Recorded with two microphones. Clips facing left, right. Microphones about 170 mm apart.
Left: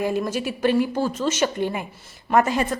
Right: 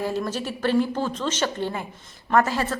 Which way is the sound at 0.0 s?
10° left (ahead or behind).